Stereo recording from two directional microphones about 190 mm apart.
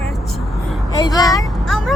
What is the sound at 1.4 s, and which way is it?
Vehicle, centre (ahead or behind).